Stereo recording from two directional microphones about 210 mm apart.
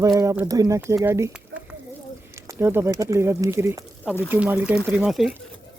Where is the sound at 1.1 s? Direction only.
10° right (ahead or behind).